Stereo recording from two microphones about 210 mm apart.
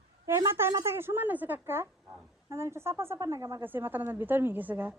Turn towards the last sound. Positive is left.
turn(degrees=-10)  # may be behind; listen again after turning